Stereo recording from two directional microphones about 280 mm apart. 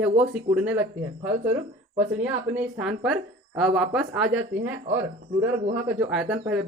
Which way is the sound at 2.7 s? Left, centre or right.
Centre.